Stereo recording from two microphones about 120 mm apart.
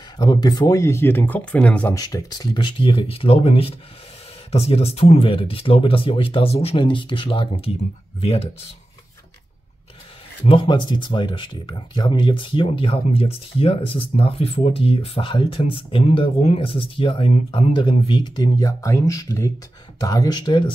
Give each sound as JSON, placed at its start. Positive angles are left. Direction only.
{"t": 0.2, "sound": "speech", "side_deg": 35}
{"t": 2.0, "sound": "speech", "side_deg": 30}
{"t": 10.4, "sound": "speech", "side_deg": 45}